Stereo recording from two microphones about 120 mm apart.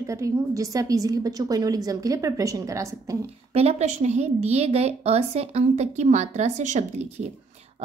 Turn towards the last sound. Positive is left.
turn(degrees=-75)  # may be behind; listen again after turning